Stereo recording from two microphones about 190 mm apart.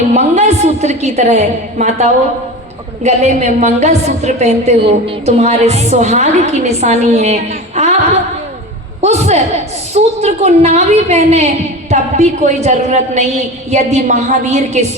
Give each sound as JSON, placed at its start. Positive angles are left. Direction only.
{"t": 0.1, "sound": "a sound", "side_deg": -35}
{"t": 3.0, "sound": "a woman's voice", "side_deg": -35}
{"t": 9.0, "sound": "a man's voice", "side_deg": -35}